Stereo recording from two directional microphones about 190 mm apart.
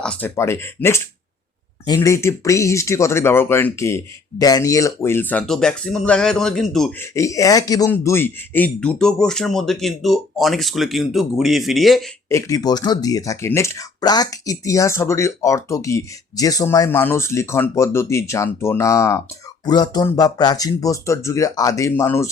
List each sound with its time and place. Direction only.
0.0 s speech: 10° left (ahead or behind)
7.0 s a man's voice: 15° left (ahead or behind); by 12.0 s centre (ahead or behind)
12.3 s speech: 15° left (ahead or behind)